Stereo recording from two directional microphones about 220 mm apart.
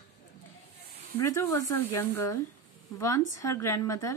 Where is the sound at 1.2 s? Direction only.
15° left (ahead or behind).